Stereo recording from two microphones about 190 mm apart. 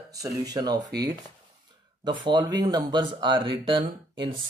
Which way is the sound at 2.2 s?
20° right (ahead or behind).